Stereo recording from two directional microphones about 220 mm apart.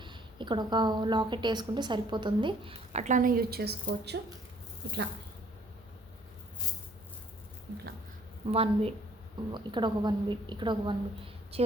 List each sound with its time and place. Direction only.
0.0 s a woman's voice: 20° right (ahead or behind); by 4.2 s 50° right (ahead or behind)
8.4 s a woman's voice: 25° right (ahead or behind)